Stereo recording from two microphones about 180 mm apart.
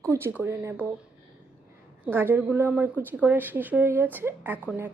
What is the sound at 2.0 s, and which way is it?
A woman's voice, 10° right (ahead or behind).